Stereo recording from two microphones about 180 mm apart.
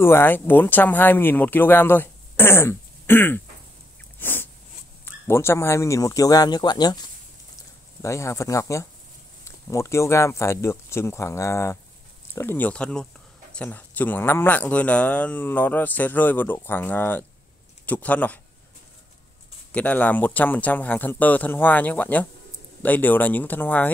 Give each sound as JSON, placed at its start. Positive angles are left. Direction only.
{"t": 0.0, "sound": "speech", "side_deg": 10}
{"t": 4.2, "sound": "a sound", "side_deg": 10}
{"t": 5.0, "sound": "a man's voice", "side_deg": 15}
{"t": 8.0, "sound": "speech", "side_deg": 15}
{"t": 19.7, "sound": "speech", "side_deg": 10}